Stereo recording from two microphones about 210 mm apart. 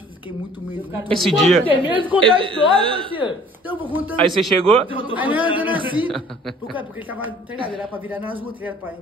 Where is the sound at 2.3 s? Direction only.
25° right (ahead or behind).